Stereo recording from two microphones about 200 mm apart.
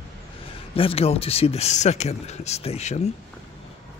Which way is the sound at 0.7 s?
30° left (ahead or behind).